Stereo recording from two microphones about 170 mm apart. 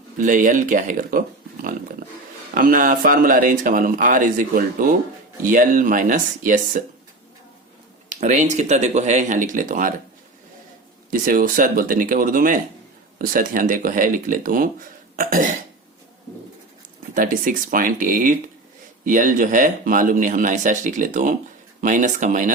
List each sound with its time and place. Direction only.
0.2 s speech: 50° right (ahead or behind)
2.6 s speech: 55° right (ahead or behind)
8.1 s speech: 45° right (ahead or behind)
11.1 s speech: 55° right (ahead or behind)
17.2 s speech: 50° right (ahead or behind)